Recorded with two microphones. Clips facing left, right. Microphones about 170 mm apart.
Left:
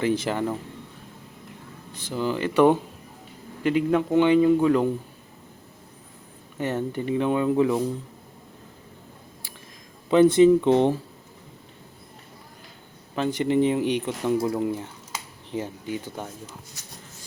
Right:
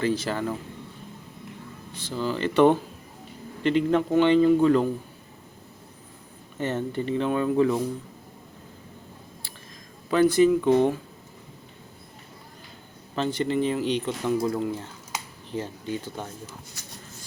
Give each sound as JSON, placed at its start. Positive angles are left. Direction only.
{"t": 0.0, "sound": "speech", "side_deg": 15}
{"t": 1.9, "sound": "speech", "side_deg": 15}
{"t": 6.6, "sound": "speech", "side_deg": 15}
{"t": 10.1, "sound": "speech", "side_deg": 25}
{"t": 13.1, "sound": "speech", "side_deg": 15}